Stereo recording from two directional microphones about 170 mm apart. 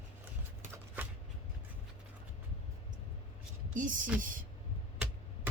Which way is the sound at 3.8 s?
50° right (ahead or behind).